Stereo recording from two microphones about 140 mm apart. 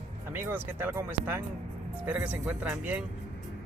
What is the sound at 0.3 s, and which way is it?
Speech, 15° right (ahead or behind).